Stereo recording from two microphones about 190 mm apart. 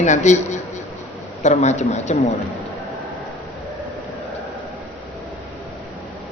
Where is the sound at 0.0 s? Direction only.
35° left (ahead or behind).